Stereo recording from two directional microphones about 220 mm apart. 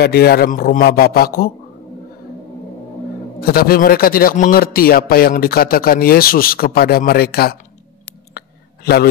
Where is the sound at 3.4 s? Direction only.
45° left (ahead or behind).